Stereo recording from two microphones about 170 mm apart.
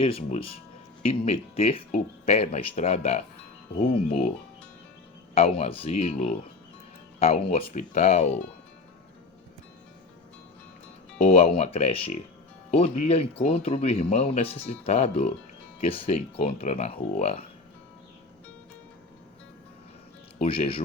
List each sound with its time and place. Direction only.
0.0 s speech: 35° left (ahead or behind)
5.3 s speech: 35° left (ahead or behind)
11.2 s speech: 40° left (ahead or behind)
20.4 s speech: 35° left (ahead or behind)